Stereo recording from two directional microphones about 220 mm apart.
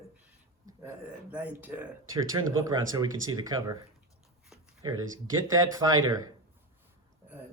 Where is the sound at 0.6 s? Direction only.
15° right (ahead or behind).